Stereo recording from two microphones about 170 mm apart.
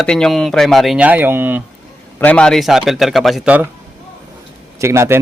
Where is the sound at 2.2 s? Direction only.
5° left (ahead or behind); by 3.7 s 10° right (ahead or behind).